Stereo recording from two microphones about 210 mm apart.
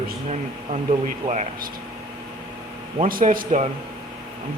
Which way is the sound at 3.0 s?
40° right (ahead or behind).